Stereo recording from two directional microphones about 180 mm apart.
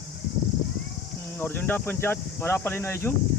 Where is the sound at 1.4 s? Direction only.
10° left (ahead or behind).